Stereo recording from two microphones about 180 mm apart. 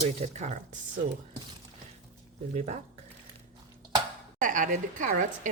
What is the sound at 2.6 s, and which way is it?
Speech, 40° right (ahead or behind).